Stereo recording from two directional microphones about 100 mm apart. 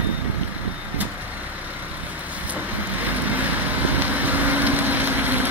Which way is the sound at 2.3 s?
15° right (ahead or behind).